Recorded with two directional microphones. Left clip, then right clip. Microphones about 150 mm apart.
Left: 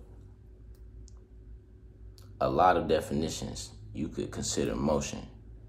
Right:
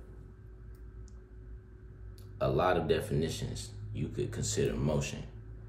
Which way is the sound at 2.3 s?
15° left (ahead or behind).